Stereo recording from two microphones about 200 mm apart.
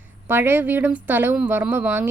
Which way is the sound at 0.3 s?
10° right (ahead or behind).